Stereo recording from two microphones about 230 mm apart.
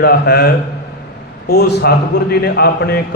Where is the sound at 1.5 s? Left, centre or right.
Left.